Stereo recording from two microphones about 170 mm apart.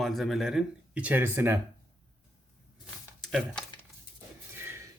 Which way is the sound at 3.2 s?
5° left (ahead or behind).